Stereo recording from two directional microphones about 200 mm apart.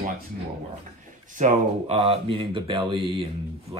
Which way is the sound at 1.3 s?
35° right (ahead or behind).